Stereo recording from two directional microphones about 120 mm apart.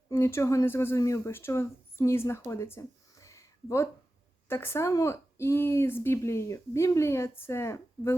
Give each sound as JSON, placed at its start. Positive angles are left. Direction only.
{"t": 0.1, "sound": "speech", "side_deg": 20}